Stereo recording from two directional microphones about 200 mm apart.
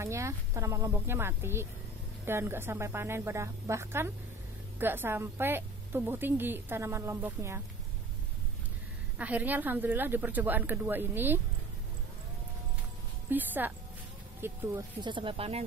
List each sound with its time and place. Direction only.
0.0 s a woman's voice: 15° right (ahead or behind)
9.2 s a woman's voice: 10° right (ahead or behind)
13.3 s a woman's voice: 10° right (ahead or behind); by 15.6 s 30° right (ahead or behind)